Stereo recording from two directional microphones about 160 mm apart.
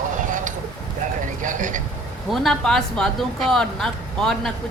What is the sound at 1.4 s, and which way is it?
Speech, 55° right (ahead or behind).